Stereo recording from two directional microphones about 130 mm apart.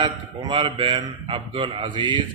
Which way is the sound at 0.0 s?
35° right (ahead or behind).